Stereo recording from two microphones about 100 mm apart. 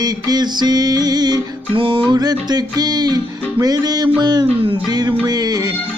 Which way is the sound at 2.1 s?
40° right (ahead or behind).